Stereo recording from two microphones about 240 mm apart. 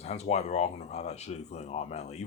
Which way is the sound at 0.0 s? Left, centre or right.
Left.